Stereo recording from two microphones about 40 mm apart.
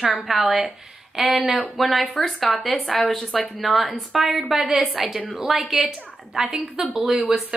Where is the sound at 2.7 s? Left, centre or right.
Centre.